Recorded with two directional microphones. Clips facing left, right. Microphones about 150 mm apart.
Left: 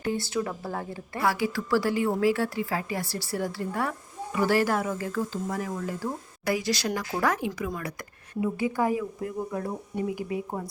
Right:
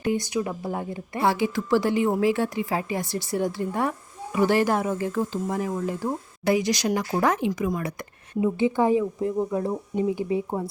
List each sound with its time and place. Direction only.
0.0 s speech: 15° right (ahead or behind)